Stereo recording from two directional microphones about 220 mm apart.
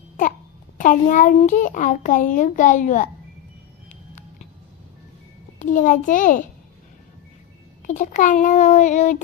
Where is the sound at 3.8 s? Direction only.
35° left (ahead or behind).